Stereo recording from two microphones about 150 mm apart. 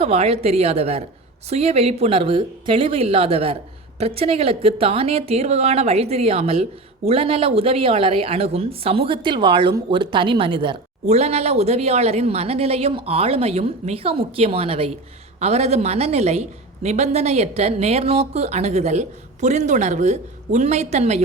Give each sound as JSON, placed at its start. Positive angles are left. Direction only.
{"t": 0.0, "sound": "a woman's voice", "side_deg": -45}
{"t": 11.0, "sound": "a woman's voice", "side_deg": -45}